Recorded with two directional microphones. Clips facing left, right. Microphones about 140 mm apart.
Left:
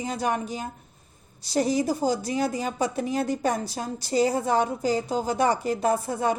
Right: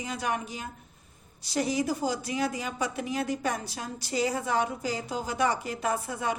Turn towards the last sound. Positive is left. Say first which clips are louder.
# left 6 dB
turn(degrees=35)  # may be behind; listen again after turning